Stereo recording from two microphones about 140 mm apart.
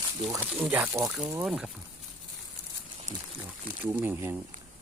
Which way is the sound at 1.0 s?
5° right (ahead or behind).